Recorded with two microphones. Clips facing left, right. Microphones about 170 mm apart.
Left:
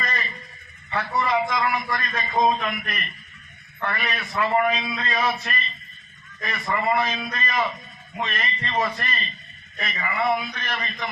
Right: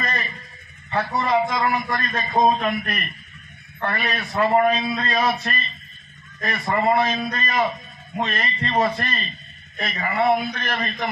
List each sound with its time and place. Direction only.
0.0 s a sound: 35° right (ahead or behind)
0.9 s a man's voice: 30° right (ahead or behind)
10.6 s a man's voice: 50° right (ahead or behind)